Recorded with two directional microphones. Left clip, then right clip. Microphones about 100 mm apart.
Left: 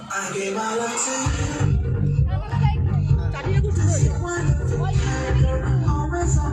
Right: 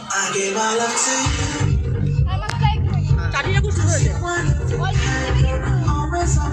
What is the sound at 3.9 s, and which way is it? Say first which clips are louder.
Music: right 6 dB; centre (ahead or behind).